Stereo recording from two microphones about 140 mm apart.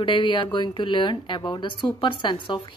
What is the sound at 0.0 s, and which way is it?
Speech, 35° left (ahead or behind).